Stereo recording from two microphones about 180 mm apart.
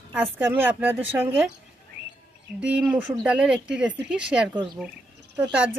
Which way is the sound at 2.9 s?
5° right (ahead or behind).